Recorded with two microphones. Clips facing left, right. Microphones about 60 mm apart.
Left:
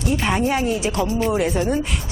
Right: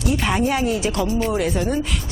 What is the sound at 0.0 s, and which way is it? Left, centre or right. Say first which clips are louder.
Speech: even; centre.